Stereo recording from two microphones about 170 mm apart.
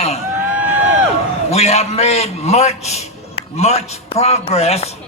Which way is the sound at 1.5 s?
40° left (ahead or behind).